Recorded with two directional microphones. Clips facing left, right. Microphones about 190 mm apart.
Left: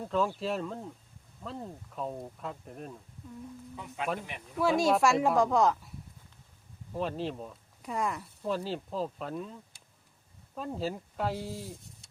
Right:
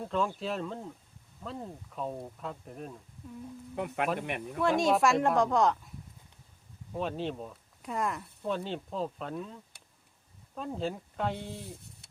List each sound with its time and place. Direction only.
0.0 s speech: centre (ahead or behind)
3.8 s speech: 65° right (ahead or behind)
4.6 s speech: centre (ahead or behind)
6.9 s speech: centre (ahead or behind)